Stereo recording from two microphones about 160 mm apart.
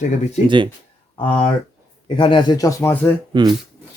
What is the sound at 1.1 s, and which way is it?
A man's voice, 35° left (ahead or behind).